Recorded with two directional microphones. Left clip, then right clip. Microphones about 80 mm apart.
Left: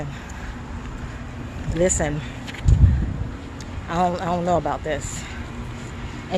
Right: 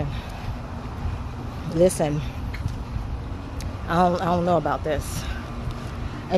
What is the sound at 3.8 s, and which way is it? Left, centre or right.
Speech, right.